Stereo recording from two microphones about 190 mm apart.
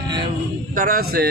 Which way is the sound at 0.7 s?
50° right (ahead or behind).